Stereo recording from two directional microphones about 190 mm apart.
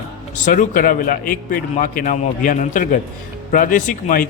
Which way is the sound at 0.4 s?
45° left (ahead or behind).